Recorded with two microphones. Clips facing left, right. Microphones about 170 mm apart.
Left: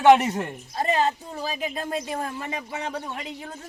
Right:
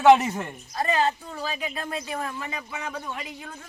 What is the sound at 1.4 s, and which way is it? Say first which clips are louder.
Speech: left 2 dB; 40° left (ahead or behind).